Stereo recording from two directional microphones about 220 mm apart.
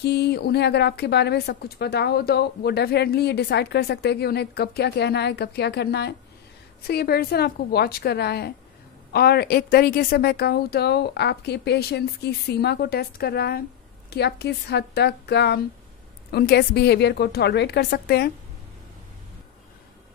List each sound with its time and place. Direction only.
0.0 s a woman's voice: 50° left (ahead or behind)